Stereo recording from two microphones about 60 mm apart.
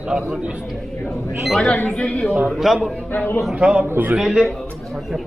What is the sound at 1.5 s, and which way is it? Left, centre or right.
Speech, centre.